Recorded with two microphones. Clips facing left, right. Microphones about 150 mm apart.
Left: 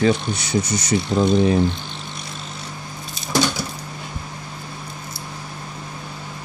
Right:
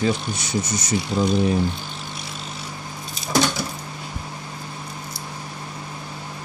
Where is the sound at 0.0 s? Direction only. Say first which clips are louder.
Left 4 dB; 70° left (ahead or behind).